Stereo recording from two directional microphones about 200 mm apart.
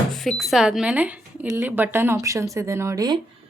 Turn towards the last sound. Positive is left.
turn(degrees=-20)  # may be behind; listen again after turning